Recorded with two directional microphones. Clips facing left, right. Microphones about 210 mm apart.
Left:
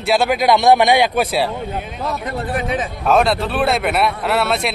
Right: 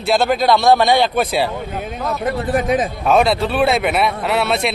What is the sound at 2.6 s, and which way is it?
Speech, 40° right (ahead or behind).